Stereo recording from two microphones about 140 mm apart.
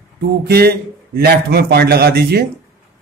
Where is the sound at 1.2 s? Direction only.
90° right.